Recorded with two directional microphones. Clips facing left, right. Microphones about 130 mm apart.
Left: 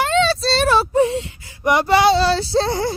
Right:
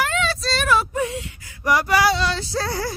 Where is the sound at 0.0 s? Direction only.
30° left (ahead or behind).